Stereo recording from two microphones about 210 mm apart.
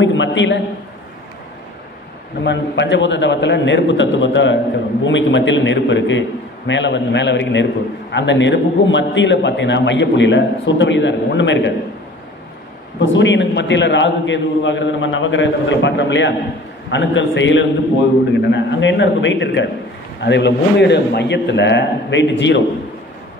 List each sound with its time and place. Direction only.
0.0 s a sound: 60° left (ahead or behind)
2.4 s a man's voice: 55° left (ahead or behind)
13.0 s a man's voice: 60° left (ahead or behind)